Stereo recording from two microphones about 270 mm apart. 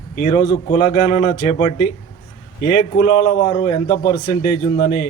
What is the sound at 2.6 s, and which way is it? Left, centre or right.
Speech, left.